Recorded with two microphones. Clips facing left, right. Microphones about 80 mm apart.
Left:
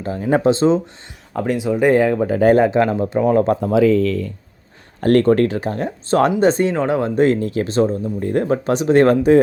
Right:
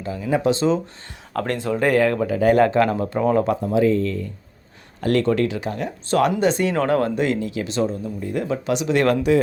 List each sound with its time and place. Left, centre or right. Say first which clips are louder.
0.0 s speech: left 5 dB; left
0.4 s speech: left 4 dB; left
1.3 s speech: left 4 dB; centre
2.2 s speech: left 4 dB; left
2.6 s speech: left 2 dB; centre
3.6 s speech: left 4 dB; left
4.9 s speech: left 6 dB; left
6.7 s speech: left 1 dB; centre
7.2 s speech: left 6 dB; left